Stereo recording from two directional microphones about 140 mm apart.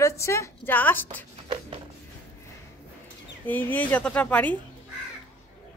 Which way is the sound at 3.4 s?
15° left (ahead or behind).